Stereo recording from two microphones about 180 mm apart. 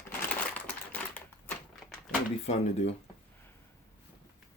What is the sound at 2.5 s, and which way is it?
Speech, 35° left (ahead or behind).